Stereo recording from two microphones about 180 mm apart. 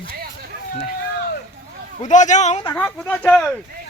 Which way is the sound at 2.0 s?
45° left (ahead or behind).